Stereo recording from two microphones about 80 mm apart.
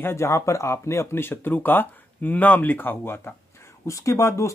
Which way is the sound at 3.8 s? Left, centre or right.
Left.